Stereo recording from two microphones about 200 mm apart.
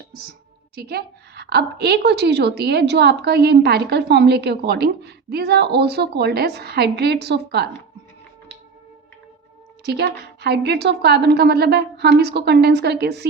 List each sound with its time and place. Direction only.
0.8 s a woman's voice: 50° right (ahead or behind)
9.8 s a woman's voice: 55° right (ahead or behind)